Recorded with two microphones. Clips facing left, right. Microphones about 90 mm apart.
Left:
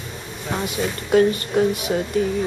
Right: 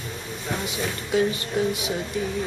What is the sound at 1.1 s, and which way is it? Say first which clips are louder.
Music: left 7 dB; 55° left (ahead or behind).